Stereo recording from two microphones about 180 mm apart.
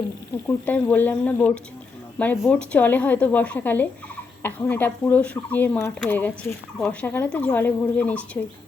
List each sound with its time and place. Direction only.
0.4 s speech: 10° left (ahead or behind)